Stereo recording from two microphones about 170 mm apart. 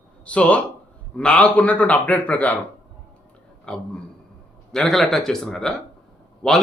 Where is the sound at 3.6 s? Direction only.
5° left (ahead or behind).